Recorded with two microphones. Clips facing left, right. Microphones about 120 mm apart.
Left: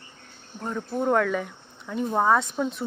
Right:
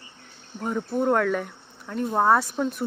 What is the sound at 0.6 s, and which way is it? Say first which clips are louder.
Speech: right 2 dB; 10° right (ahead or behind).